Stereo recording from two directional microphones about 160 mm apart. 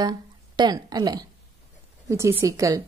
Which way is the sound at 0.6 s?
25° right (ahead or behind).